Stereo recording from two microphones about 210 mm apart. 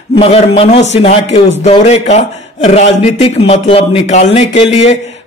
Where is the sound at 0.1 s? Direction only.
30° left (ahead or behind).